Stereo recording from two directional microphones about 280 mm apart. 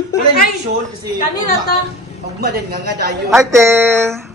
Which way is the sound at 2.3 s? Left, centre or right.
Right.